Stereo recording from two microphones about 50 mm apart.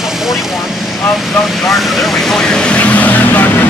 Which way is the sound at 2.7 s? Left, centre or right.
Left.